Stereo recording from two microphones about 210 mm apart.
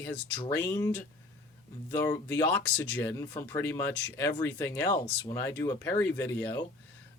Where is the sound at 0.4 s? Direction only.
15° left (ahead or behind).